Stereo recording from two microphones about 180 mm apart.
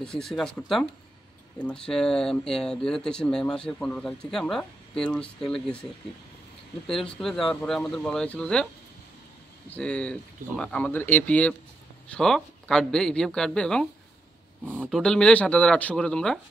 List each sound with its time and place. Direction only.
0.0 s speech: 5° left (ahead or behind)
6.9 s speech: 5° left (ahead or behind)
9.7 s speech: 5° left (ahead or behind)